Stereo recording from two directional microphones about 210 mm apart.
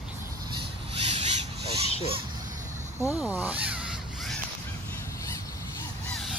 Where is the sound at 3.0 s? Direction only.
15° left (ahead or behind).